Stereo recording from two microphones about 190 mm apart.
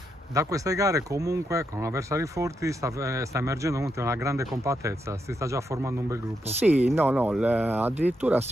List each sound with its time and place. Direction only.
0.3 s speech: 15° right (ahead or behind)